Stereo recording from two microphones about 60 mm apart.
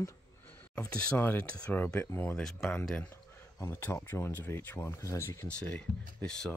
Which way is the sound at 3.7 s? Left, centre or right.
Left.